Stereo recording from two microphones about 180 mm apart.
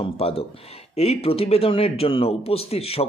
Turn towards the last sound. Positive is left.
turn(degrees=35)  # may be behind; listen again after turning